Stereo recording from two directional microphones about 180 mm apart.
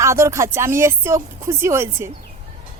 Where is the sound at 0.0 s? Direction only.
15° right (ahead or behind).